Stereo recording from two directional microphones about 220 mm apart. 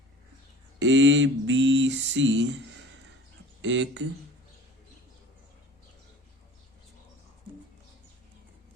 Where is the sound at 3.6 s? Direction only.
55° right (ahead or behind).